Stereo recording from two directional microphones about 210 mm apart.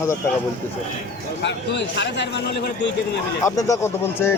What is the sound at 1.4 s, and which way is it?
A man's voice, 55° left (ahead or behind).